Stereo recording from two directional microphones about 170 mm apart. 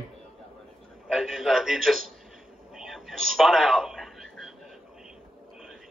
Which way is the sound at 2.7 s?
Centre (ahead or behind).